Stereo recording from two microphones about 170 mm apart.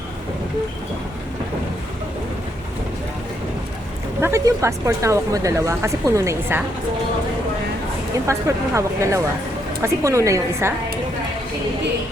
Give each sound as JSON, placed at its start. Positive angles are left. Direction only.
{"t": 4.2, "sound": "speech", "side_deg": -15}
{"t": 8.3, "sound": "speech", "side_deg": -15}